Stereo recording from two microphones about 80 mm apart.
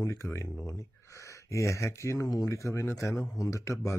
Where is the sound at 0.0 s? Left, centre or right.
Left.